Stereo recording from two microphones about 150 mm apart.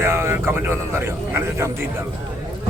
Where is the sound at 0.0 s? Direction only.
15° right (ahead or behind).